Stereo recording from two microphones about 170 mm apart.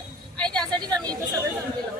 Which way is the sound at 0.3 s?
5° left (ahead or behind).